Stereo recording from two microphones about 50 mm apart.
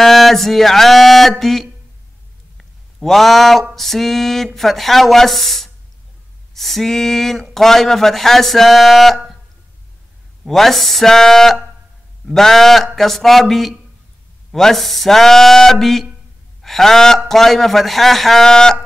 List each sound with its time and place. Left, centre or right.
0.0 s speech: centre
2.5 s a sound: centre
3.7 s speech: centre
10.4 s speech: centre